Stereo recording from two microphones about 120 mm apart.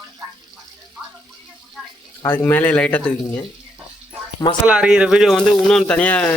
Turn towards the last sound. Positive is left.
turn(degrees=15)  # may be behind; listen again after turning